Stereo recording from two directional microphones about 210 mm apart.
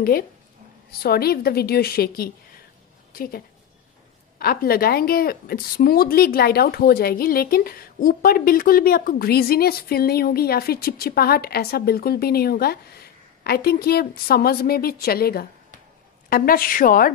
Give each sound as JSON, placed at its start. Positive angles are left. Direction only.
{"t": 1.0, "sound": "a woman's voice", "side_deg": 45}